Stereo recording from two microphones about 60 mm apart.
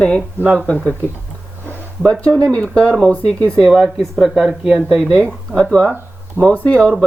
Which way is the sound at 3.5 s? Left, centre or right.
Centre.